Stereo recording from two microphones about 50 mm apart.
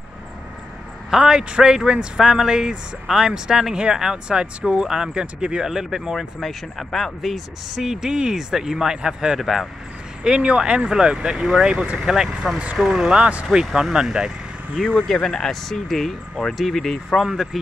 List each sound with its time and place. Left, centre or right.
1.1 s speech: centre
5.7 s speech: centre
9.4 s speech: centre
10.2 s speech: right
13.1 s speech: right
13.9 s speech: centre
15.2 s speech: centre
17.3 s speech: centre